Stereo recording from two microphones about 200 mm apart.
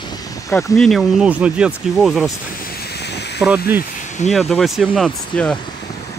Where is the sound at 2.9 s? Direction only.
55° left (ahead or behind).